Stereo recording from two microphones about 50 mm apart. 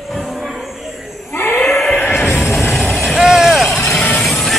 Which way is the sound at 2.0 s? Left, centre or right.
Left.